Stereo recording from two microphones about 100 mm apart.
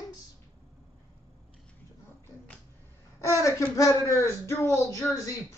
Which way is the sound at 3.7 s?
35° left (ahead or behind).